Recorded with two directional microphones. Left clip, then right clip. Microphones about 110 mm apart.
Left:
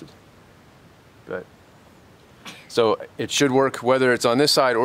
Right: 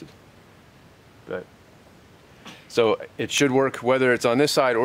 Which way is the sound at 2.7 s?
20° left (ahead or behind).